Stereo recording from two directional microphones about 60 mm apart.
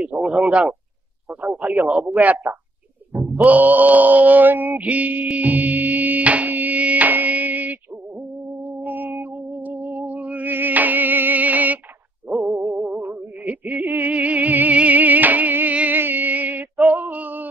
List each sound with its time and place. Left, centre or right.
0.0 s speech: centre
3.1 s music: centre
3.4 s mantra: right
8.6 s a sound: right
12.4 s music: right
16.9 s female singing: right